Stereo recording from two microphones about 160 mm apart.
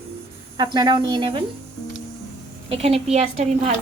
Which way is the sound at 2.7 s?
40° right (ahead or behind).